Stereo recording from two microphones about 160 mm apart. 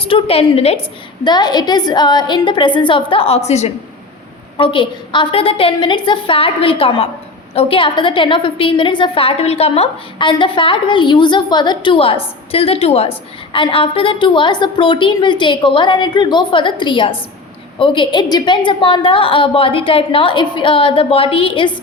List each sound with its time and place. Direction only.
0.0 s a woman's voice: 35° left (ahead or behind)
1.2 s a woman's voice: 25° left (ahead or behind); by 3.7 s 45° left (ahead or behind)
4.5 s a woman's voice: 30° left (ahead or behind)